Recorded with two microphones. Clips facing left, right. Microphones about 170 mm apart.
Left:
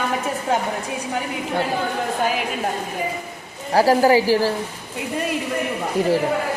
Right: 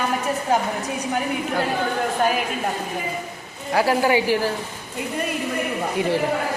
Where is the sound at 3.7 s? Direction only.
35° left (ahead or behind).